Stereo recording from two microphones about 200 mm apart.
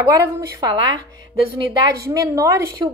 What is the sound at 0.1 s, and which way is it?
Speech, 20° right (ahead or behind).